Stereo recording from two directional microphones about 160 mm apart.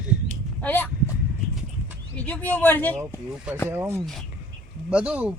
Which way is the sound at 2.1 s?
10° left (ahead or behind).